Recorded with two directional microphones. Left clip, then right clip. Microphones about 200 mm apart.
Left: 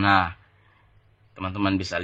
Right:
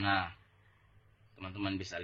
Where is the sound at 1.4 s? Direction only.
40° left (ahead or behind).